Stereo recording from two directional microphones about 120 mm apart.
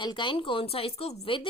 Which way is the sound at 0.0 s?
40° left (ahead or behind).